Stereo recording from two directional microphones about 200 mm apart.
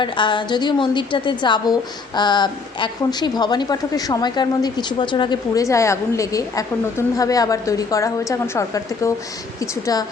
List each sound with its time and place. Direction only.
0.0 s a woman's voice: 25° left (ahead or behind)